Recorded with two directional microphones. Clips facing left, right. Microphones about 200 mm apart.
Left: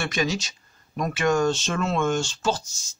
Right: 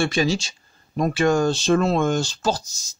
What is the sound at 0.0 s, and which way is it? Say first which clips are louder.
A man's voice: right 5 dB; 30° right (ahead or behind).